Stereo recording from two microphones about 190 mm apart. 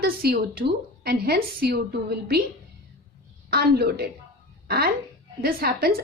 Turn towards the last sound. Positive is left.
turn(degrees=-55)  # may be behind; listen again after turning